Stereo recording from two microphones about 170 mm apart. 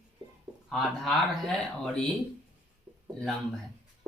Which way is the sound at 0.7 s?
Centre (ahead or behind).